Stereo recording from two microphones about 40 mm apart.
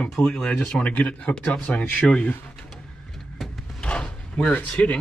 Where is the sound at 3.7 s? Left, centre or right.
Left.